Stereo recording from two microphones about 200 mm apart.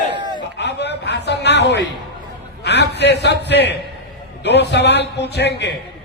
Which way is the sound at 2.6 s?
55° left (ahead or behind).